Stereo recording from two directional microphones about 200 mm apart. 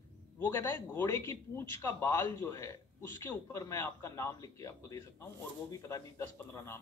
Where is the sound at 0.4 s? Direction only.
10° left (ahead or behind).